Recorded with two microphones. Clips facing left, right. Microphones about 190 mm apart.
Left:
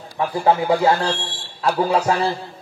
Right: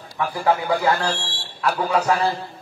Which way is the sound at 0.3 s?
25° left (ahead or behind).